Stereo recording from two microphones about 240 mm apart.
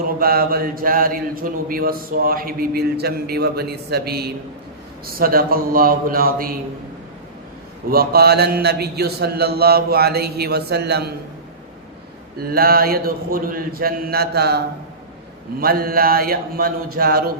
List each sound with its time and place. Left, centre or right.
0.2 s speech: right
7.9 s speech: right
12.4 s speech: right